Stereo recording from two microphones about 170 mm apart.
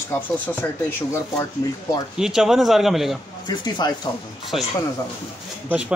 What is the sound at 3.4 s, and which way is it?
Speech, 25° left (ahead or behind).